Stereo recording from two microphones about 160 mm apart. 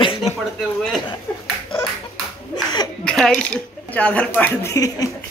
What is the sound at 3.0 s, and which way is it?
Speech, 5° left (ahead or behind).